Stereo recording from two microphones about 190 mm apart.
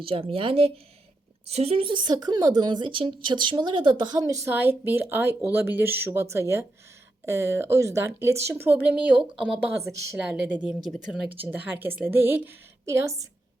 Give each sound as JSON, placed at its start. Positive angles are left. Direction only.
{"t": 0.0, "sound": "speech", "side_deg": -30}
{"t": 9.7, "sound": "a woman's voice", "side_deg": -15}